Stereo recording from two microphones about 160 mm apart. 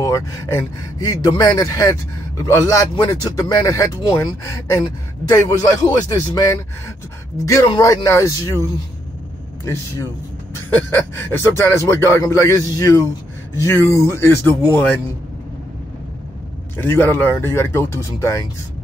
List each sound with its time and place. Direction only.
0.0 s speech: 15° left (ahead or behind)
10.5 s speech: 15° left (ahead or behind)
16.7 s speech: 15° left (ahead or behind)